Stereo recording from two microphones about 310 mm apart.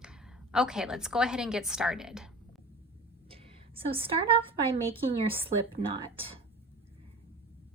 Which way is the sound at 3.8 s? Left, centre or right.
Centre.